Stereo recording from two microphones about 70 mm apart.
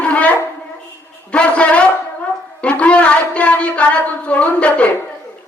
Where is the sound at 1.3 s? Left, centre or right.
Centre.